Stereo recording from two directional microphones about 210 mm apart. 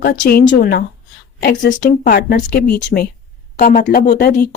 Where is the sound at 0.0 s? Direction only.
45° left (ahead or behind).